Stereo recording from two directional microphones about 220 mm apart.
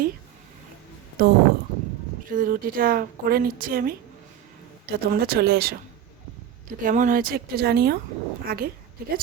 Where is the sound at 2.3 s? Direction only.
40° right (ahead or behind).